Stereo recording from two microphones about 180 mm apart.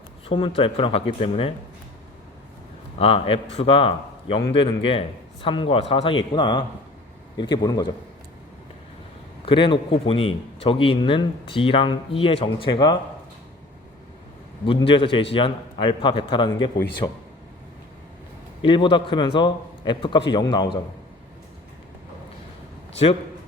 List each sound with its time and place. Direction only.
0.3 s speech: 30° left (ahead or behind)
3.0 s a man's voice: 30° left (ahead or behind)
9.5 s a man's voice: 30° left (ahead or behind)
14.6 s a man's voice: 30° left (ahead or behind)
18.6 s a man's voice: 30° left (ahead or behind)